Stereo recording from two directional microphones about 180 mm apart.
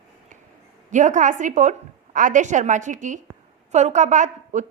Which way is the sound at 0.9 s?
45° right (ahead or behind).